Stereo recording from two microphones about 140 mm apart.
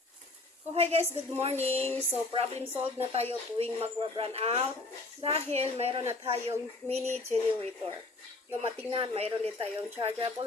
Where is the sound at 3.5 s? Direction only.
45° right (ahead or behind).